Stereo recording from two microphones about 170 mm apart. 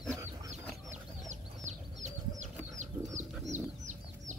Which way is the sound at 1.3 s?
45° right (ahead or behind).